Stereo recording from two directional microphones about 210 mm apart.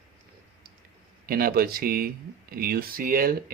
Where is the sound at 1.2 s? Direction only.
45° right (ahead or behind).